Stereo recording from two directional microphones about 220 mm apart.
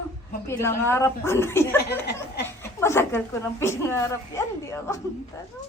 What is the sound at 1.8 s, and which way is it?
Speech, 50° left (ahead or behind).